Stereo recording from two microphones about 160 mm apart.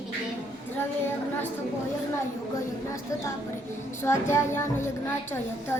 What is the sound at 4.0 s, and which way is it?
A woman's voice, 15° left (ahead or behind).